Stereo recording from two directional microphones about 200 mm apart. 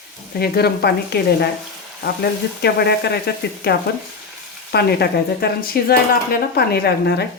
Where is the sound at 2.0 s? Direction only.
55° left (ahead or behind).